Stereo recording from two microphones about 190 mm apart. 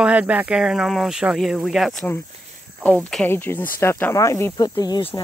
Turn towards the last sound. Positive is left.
turn(degrees=20)  # may be behind; listen again after turning